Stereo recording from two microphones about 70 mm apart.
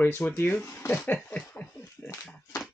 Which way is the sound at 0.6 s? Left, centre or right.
Left.